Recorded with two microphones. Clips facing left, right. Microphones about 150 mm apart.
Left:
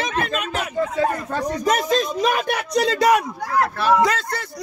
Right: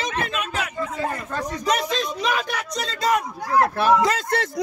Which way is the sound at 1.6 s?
45° left (ahead or behind).